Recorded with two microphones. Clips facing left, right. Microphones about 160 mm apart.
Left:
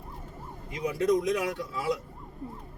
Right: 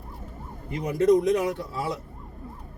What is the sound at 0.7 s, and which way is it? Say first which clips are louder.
Speech: right 5 dB; 60° right (ahead or behind).